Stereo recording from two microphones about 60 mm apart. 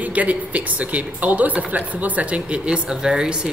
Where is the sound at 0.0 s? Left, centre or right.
Right.